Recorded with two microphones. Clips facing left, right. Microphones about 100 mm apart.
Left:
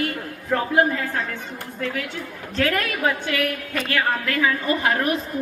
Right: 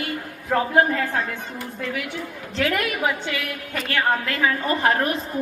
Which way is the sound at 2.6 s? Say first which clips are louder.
Even; 20° right (ahead or behind).